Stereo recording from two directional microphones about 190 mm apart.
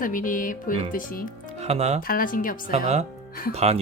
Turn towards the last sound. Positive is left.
turn(degrees=-35)  # may be behind; listen again after turning